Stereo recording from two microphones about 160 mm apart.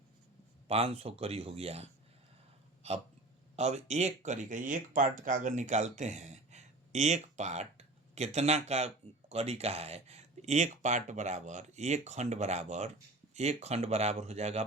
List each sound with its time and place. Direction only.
0.7 s speech: 40° right (ahead or behind)
2.8 s hiccup: 40° right (ahead or behind)
3.5 s speech: 45° right (ahead or behind)